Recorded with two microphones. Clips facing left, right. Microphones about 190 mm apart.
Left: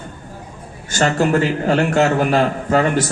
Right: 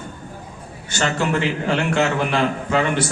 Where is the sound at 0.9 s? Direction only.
45° left (ahead or behind).